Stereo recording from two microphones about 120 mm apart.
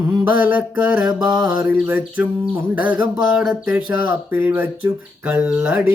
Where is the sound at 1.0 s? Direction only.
35° right (ahead or behind).